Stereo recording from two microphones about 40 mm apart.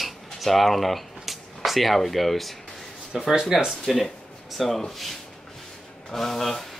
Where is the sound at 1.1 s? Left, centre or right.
Centre.